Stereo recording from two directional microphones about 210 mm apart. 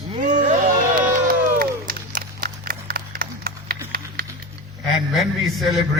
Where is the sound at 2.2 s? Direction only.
45° right (ahead or behind).